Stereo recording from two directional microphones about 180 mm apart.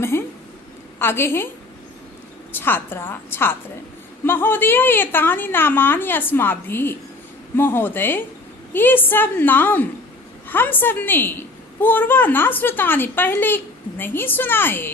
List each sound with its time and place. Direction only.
0.0 s a sound: 15° left (ahead or behind)
0.9 s a woman's voice: 15° left (ahead or behind)
2.5 s a woman's voice: 10° left (ahead or behind)